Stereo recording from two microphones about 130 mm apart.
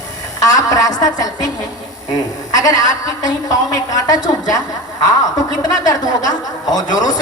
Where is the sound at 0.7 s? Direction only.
30° left (ahead or behind).